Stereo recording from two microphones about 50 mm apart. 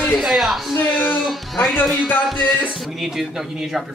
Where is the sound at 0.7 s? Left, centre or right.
Left.